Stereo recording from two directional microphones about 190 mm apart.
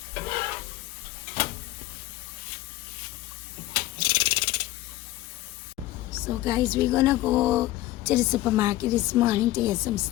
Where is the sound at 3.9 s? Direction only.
25° right (ahead or behind).